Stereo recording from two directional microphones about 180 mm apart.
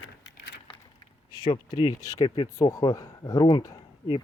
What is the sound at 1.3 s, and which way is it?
Speech, 25° left (ahead or behind).